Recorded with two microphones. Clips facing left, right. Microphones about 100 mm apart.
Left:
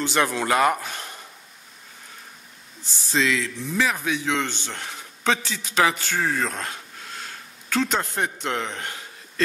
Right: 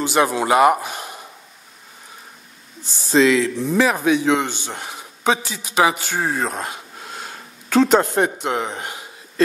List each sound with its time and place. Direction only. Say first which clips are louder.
0.0 s a man's voice: right 5 dB; 15° right (ahead or behind)
3.1 s speech: right 8 dB; 45° right (ahead or behind)
4.0 s a man's voice: right 8 dB; 25° right (ahead or behind)
7.9 s a man's voice: right 10 dB; 60° right (ahead or behind)
8.4 s a man's voice: right 4 dB; 15° right (ahead or behind)